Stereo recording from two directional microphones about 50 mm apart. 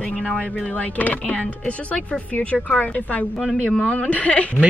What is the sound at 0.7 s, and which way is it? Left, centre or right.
Speech, left.